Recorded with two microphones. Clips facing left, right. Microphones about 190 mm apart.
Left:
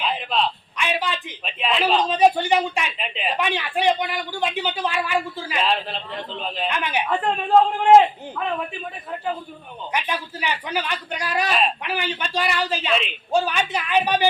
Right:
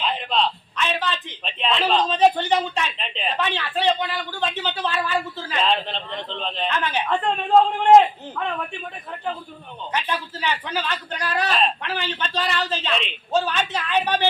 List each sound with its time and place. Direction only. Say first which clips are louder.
0.0 s a man's voice: even; 5° left (ahead or behind)
9.9 s a man's voice: even; 10° left (ahead or behind)